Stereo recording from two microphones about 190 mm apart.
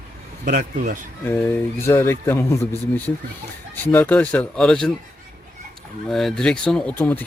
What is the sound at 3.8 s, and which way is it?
Speech, 10° left (ahead or behind).